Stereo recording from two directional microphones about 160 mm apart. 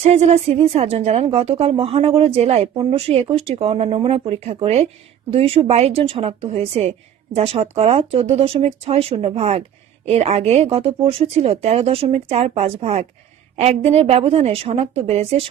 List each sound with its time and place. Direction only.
0.0 s a woman's voice: 40° right (ahead or behind)